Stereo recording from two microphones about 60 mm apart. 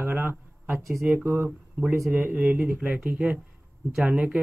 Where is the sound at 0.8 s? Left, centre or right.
Right.